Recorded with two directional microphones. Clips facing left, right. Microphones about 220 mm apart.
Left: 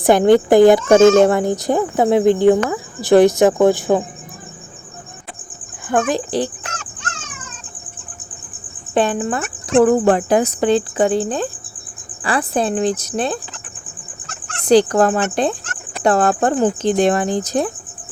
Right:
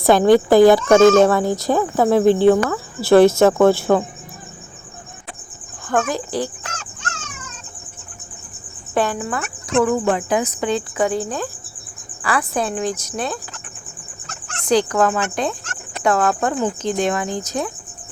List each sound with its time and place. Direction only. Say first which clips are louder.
0.0 s speech: left 1 dB; 20° left (ahead or behind)
5.9 s speech: left 3 dB; 20° left (ahead or behind)
9.0 s speech: left 3 dB; 25° left (ahead or behind)
9.9 s speech: left 5 dB; 45° left (ahead or behind); by 13.4 s 30° left (ahead or behind)
14.7 s speech: left 4 dB; 35° left (ahead or behind)